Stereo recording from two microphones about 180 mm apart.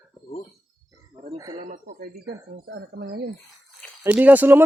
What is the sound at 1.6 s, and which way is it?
Speech, 50° right (ahead or behind).